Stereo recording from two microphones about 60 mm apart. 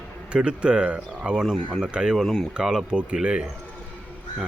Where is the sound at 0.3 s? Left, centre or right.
Centre.